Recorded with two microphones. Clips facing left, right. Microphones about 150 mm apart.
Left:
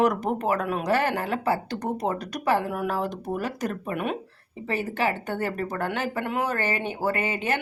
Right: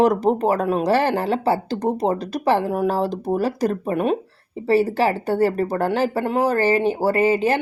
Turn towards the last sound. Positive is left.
turn(degrees=-30)  # may be behind; listen again after turning